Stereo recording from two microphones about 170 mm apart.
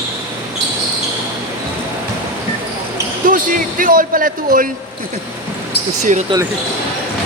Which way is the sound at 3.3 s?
50° right (ahead or behind).